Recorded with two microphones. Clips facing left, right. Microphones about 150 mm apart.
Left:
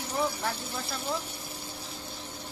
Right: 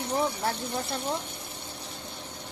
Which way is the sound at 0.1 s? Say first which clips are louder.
Right 2 dB; 35° right (ahead or behind).